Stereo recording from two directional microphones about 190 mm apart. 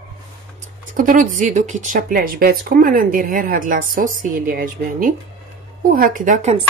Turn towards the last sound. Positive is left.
turn(degrees=-40)  # may be behind; listen again after turning